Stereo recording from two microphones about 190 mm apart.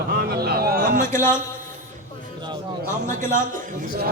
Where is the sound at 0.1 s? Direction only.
55° right (ahead or behind).